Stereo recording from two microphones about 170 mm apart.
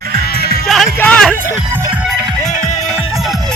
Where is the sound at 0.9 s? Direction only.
10° left (ahead or behind).